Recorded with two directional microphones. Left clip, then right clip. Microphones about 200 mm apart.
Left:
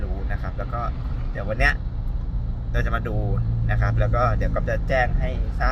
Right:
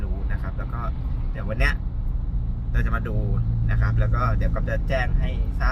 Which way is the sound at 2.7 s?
10° right (ahead or behind).